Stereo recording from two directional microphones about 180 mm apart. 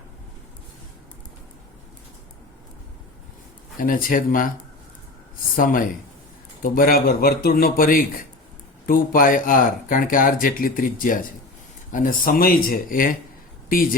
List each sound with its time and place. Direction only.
3.8 s speech: 50° left (ahead or behind)
5.5 s speech: 50° left (ahead or behind)